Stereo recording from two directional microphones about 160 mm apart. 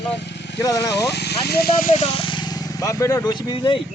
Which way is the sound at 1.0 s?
90° left.